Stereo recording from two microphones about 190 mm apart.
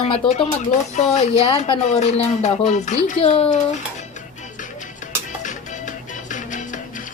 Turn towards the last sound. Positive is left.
turn(degrees=40)  # may be behind; listen again after turning